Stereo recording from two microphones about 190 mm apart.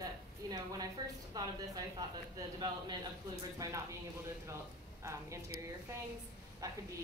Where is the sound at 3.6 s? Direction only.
15° right (ahead or behind).